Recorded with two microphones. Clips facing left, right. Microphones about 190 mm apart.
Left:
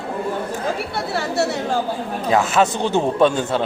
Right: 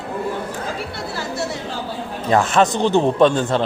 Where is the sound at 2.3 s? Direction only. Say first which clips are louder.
Right 1 dB; centre (ahead or behind).